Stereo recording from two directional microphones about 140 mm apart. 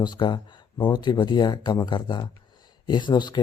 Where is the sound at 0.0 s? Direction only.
30° left (ahead or behind).